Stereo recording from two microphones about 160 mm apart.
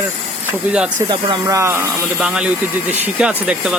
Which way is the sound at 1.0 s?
30° right (ahead or behind).